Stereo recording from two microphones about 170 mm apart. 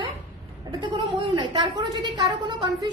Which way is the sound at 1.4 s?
30° right (ahead or behind).